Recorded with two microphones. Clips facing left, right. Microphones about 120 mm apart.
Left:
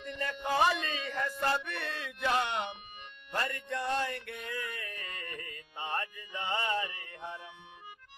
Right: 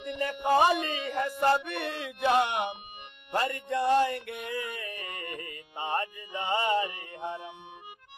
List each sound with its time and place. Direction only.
0.2 s a sound: 15° right (ahead or behind)
0.6 s a man's voice: 15° right (ahead or behind)
3.3 s music: 15° right (ahead or behind)